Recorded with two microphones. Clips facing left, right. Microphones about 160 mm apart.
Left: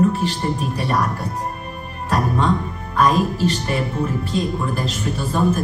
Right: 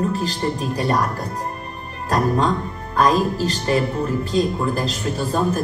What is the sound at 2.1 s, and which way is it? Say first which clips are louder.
Speech: right 1 dB; 35° right (ahead or behind).